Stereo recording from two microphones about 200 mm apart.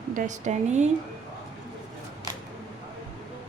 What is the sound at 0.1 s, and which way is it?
Speech, 40° right (ahead or behind).